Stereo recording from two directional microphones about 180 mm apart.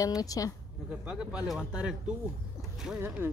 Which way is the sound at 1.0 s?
5° right (ahead or behind).